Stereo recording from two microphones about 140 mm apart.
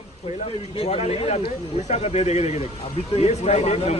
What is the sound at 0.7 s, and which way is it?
A man's voice, 45° left (ahead or behind).